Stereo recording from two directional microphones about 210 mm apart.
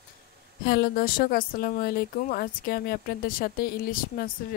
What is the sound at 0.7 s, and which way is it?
A woman's voice, 45° left (ahead or behind).